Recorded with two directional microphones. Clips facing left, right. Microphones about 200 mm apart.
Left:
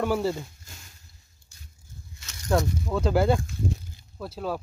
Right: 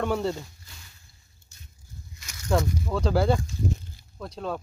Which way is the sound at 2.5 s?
5° left (ahead or behind).